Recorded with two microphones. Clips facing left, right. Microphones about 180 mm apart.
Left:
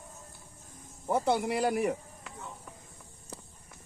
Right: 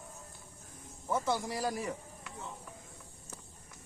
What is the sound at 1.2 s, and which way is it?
Speech, 65° left (ahead or behind).